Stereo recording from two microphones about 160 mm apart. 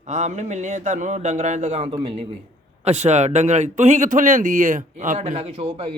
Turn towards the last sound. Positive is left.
turn(degrees=-40)  # may be behind; listen again after turning